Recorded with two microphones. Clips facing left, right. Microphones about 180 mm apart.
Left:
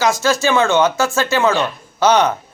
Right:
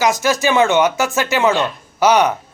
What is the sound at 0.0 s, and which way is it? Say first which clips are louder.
Speech: even; 15° right (ahead or behind).